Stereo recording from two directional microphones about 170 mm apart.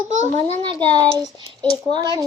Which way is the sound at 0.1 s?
45° right (ahead or behind).